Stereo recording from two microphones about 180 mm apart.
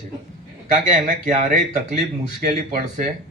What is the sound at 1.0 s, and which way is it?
Speech, 45° right (ahead or behind).